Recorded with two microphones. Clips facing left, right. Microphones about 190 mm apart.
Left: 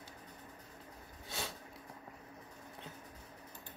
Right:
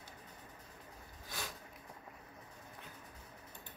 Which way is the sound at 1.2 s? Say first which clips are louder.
Left 3 dB; 25° left (ahead or behind).